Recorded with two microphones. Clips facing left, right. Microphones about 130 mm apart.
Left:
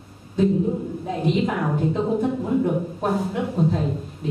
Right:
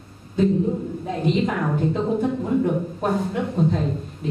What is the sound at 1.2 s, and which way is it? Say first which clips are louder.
A woman's voice: even; 5° left (ahead or behind).